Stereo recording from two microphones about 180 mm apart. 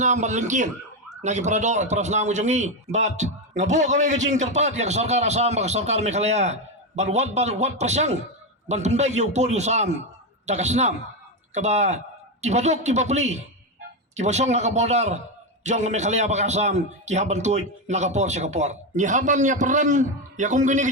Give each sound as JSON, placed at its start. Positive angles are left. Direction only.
{"t": 0.0, "sound": "a man's voice", "side_deg": -40}